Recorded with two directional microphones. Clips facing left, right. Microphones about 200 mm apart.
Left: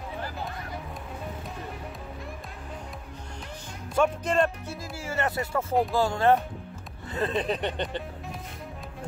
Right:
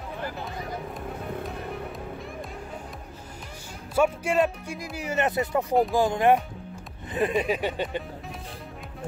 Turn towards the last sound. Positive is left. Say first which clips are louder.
# right 2 dB
turn(degrees=-10)  # may be behind; listen again after turning